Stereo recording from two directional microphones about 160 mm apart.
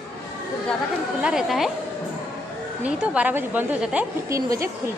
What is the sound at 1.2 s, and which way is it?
Speech, 5° right (ahead or behind).